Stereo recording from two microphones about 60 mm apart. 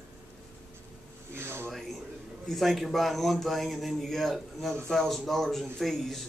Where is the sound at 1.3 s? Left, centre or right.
Right.